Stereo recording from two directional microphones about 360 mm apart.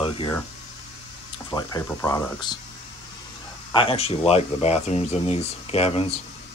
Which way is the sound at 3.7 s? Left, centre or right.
Centre.